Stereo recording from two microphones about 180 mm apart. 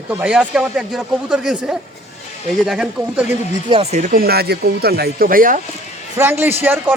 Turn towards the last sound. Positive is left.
turn(degrees=-10)  # may be behind; listen again after turning